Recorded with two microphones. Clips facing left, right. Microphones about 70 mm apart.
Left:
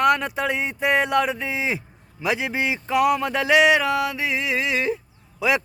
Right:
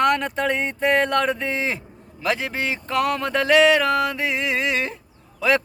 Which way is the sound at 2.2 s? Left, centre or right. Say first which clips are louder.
Even; centre.